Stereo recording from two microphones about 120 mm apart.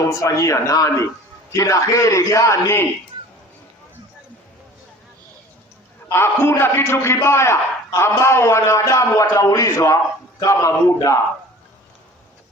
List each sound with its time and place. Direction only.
0.1 s a man's voice: 25° left (ahead or behind)
6.1 s a man's voice: 20° left (ahead or behind)